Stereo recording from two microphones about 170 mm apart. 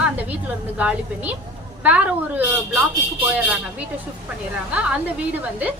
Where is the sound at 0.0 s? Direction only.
10° right (ahead or behind).